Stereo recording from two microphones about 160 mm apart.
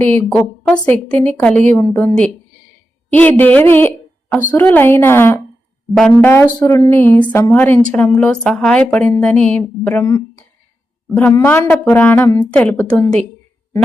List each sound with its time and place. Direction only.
0.0 s a woman's voice: 15° left (ahead or behind)